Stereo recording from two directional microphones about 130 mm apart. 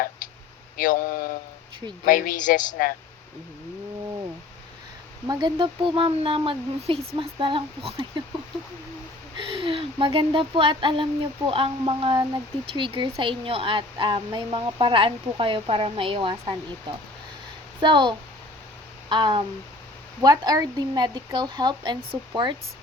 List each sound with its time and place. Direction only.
0.8 s speech: 90° left
5.2 s speech: 30° right (ahead or behind)
9.5 s speech: 40° right (ahead or behind)